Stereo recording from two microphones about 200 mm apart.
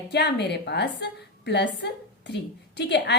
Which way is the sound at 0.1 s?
55° left (ahead or behind).